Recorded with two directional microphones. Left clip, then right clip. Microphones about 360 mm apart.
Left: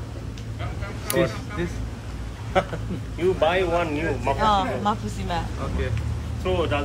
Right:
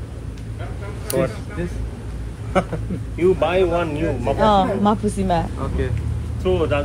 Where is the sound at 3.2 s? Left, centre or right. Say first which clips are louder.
Right 4 dB; right.